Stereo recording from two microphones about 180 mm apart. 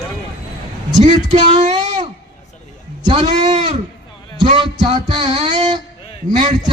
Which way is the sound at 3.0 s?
25° right (ahead or behind).